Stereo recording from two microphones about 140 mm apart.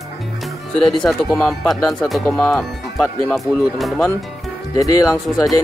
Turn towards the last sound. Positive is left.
turn(degrees=0)  # may be behind; listen again after turning